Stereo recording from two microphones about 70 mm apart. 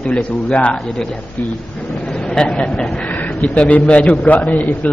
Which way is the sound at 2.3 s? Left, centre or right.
Centre.